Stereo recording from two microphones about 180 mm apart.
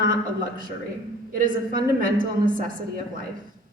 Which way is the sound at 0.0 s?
50° right (ahead or behind).